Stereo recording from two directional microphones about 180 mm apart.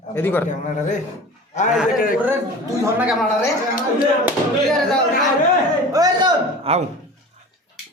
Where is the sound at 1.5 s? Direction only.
40° left (ahead or behind).